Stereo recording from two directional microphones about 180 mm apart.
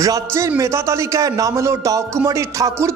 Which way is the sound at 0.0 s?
15° right (ahead or behind).